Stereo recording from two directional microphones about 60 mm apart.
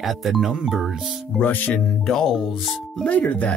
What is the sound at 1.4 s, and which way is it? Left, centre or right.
Speech, left.